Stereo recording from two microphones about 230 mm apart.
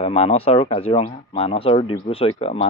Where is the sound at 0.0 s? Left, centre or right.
Left.